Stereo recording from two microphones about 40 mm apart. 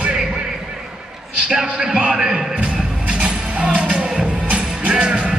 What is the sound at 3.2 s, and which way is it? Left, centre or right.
Music, right.